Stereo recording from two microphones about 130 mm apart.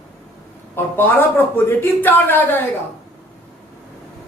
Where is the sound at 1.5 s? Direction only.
15° left (ahead or behind).